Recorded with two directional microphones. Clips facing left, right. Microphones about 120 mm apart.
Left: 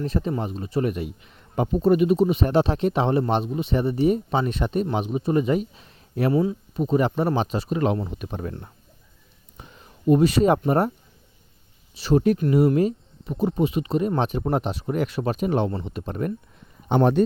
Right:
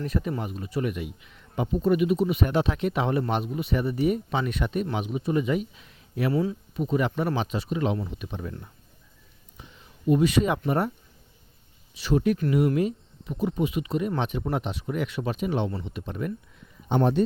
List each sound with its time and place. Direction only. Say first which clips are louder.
0.0 s a man's voice: left 3 dB; 30° left (ahead or behind)
6.3 s speech: left 4 dB; 20° left (ahead or behind)
6.7 s a man's voice: left 4 dB; 35° left (ahead or behind)
9.6 s a sound: left 3 dB; 45° left (ahead or behind)
10.7 s a man's voice: left 4 dB; 40° left (ahead or behind)
11.9 s a man's voice: left 4 dB; 35° left (ahead or behind)
16.9 s speech: left 4 dB; 60° left (ahead or behind)